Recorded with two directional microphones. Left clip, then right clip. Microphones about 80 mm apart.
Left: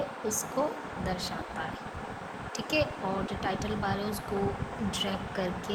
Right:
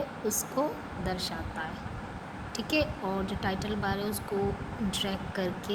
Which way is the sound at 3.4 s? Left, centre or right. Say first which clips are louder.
Even; right.